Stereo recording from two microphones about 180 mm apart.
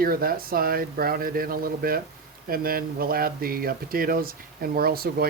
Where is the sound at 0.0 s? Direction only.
55° right (ahead or behind).